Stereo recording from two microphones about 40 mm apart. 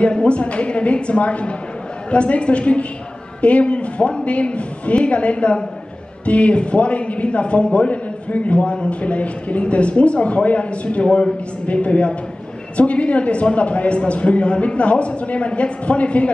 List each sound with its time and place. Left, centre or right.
0.0 s a woman's voice: left